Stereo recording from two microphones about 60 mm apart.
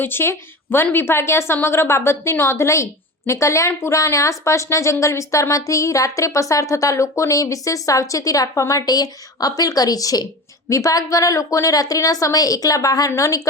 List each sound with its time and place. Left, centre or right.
0.0 s a woman's voice: left
10.7 s a woman's voice: left
13.1 s speech: left